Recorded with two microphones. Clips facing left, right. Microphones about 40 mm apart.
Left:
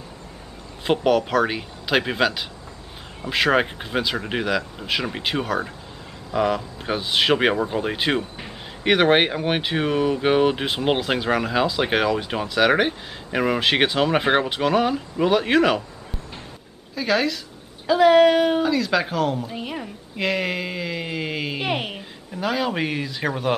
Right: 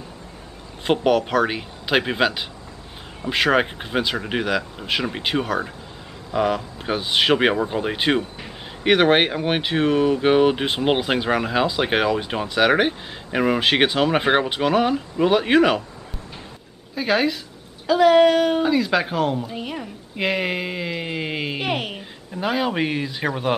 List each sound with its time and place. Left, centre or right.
0.8 s speech: centre
16.9 s speech: centre
17.8 s speech: centre
18.6 s speech: centre
20.2 s speech: centre
21.6 s a sound: centre
22.4 s speech: centre